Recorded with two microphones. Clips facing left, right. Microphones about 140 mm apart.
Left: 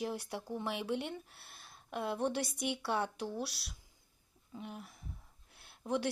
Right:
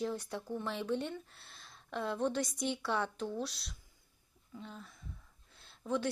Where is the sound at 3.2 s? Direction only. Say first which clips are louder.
Right 1 dB; 10° left (ahead or behind).